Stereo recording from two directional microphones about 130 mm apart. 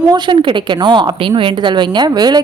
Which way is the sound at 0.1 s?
40° right (ahead or behind).